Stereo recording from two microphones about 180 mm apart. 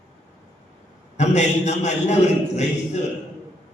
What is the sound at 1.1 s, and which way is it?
A man's voice, 40° left (ahead or behind).